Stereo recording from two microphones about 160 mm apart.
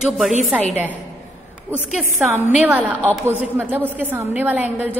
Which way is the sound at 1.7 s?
5° right (ahead or behind).